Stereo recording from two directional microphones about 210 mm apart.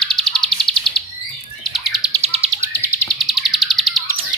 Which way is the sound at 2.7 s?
5° left (ahead or behind).